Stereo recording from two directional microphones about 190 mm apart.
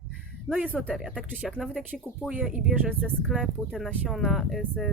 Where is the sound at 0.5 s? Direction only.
10° right (ahead or behind).